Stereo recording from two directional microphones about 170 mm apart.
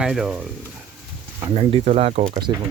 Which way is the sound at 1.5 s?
30° right (ahead or behind).